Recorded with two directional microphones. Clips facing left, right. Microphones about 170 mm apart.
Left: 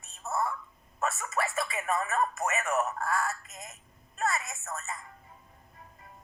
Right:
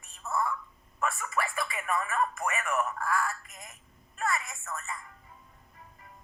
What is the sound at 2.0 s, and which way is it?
Radio, 40° left (ahead or behind).